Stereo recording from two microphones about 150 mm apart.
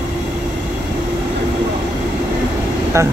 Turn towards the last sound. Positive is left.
turn(degrees=-20)  # may be behind; listen again after turning